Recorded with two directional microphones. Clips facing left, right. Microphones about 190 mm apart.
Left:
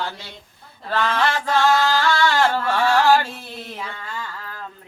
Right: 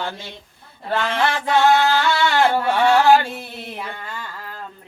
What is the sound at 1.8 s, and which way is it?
Music, 20° right (ahead or behind).